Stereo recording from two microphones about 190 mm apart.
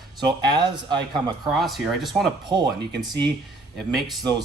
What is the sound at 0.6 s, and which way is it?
Speech, 25° right (ahead or behind).